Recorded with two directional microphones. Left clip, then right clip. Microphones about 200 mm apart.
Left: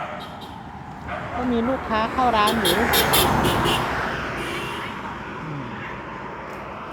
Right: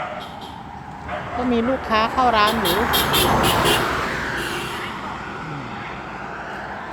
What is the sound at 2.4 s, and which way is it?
Speech, 50° left (ahead or behind).